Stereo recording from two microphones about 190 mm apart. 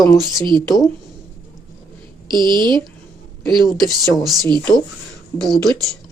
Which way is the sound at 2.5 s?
25° right (ahead or behind).